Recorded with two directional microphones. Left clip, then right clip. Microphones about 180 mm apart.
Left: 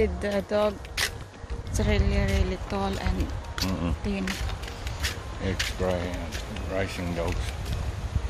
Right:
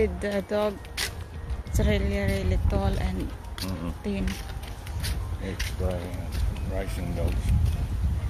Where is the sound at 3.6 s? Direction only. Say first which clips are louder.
Left 5 dB; 15° left (ahead or behind).